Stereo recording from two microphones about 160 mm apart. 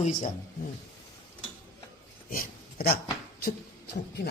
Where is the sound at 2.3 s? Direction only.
70° left (ahead or behind).